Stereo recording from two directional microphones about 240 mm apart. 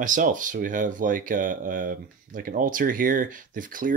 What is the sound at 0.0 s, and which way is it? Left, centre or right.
Speech, right.